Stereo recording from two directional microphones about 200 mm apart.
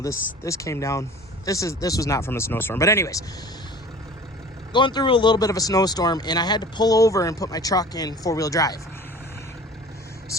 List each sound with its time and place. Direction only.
0.4 s speech: 15° left (ahead or behind)
4.7 s speech: 20° left (ahead or behind)